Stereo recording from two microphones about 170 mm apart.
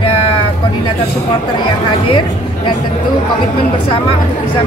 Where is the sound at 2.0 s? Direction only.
30° left (ahead or behind).